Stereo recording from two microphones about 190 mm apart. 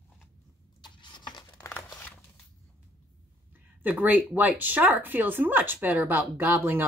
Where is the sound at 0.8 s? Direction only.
25° left (ahead or behind).